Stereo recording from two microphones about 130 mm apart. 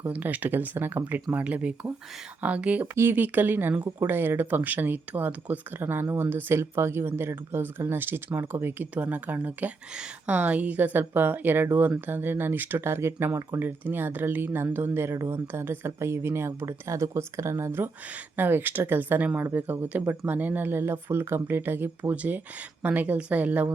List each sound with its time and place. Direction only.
0.0 s speech: 10° right (ahead or behind)